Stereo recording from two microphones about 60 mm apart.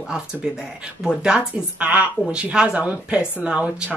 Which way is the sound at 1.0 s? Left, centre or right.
Centre.